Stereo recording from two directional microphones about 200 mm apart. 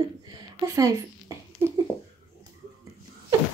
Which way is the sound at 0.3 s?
15° right (ahead or behind).